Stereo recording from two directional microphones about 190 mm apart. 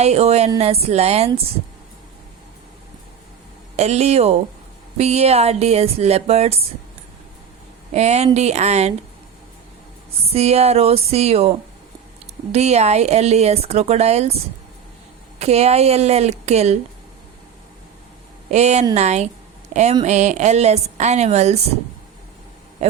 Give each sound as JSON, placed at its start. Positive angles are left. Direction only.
{"t": 0.0, "sound": "speech", "side_deg": -35}
{"t": 3.8, "sound": "speech", "side_deg": -35}
{"t": 7.9, "sound": "speech", "side_deg": -35}
{"t": 10.2, "sound": "speech", "side_deg": -35}
{"t": 15.4, "sound": "speech", "side_deg": -35}
{"t": 18.5, "sound": "speech", "side_deg": -35}